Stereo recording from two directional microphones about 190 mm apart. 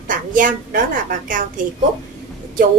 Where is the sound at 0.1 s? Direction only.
45° right (ahead or behind).